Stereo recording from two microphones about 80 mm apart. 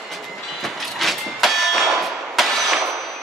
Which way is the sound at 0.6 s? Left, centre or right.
Centre.